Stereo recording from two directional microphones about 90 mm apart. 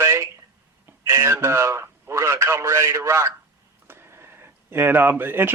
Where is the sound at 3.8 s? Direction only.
25° right (ahead or behind).